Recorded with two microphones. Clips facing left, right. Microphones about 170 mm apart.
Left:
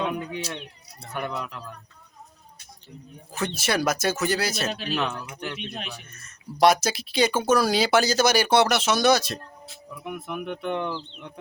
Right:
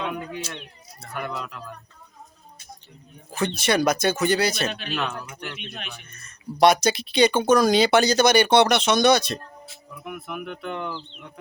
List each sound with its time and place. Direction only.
1.1 s speech: 20° left (ahead or behind)
3.3 s speech: 5° left (ahead or behind)
4.7 s speech: 35° left (ahead or behind)
6.1 s speech: 5° left (ahead or behind)
10.0 s speech: 20° left (ahead or behind)